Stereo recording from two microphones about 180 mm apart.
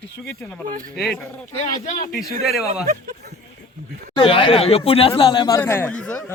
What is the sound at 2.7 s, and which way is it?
Speech, 45° right (ahead or behind).